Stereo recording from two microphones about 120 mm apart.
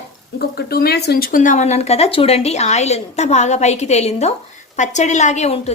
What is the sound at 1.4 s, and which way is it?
A woman's voice, 85° left.